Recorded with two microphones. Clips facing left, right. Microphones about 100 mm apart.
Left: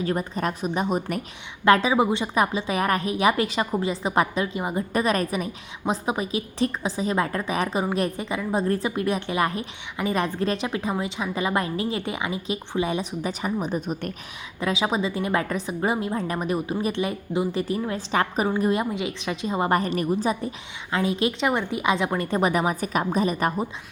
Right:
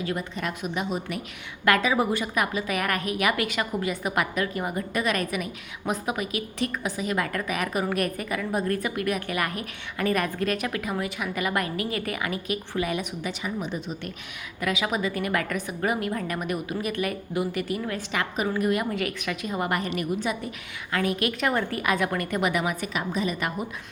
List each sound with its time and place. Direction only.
0.0 s a woman's voice: 40° left (ahead or behind)
1.6 s a woman's voice: 30° left (ahead or behind)
4.9 s a woman's voice: 35° left (ahead or behind)
14.6 s a woman's voice: 30° left (ahead or behind)
20.9 s a woman's voice: 25° left (ahead or behind)